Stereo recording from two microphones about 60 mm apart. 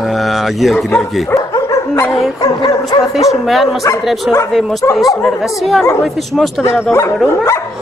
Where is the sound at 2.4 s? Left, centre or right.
Left.